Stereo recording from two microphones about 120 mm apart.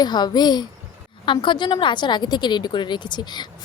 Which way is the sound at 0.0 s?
35° left (ahead or behind).